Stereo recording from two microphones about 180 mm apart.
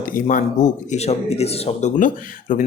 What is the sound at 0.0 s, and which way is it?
Speech, 50° left (ahead or behind).